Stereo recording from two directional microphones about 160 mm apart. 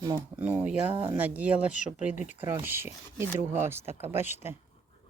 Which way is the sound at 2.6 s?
15° right (ahead or behind).